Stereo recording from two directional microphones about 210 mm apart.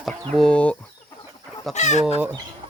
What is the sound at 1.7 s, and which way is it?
Speech, 35° left (ahead or behind).